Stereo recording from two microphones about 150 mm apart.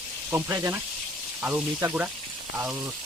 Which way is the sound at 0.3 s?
15° right (ahead or behind).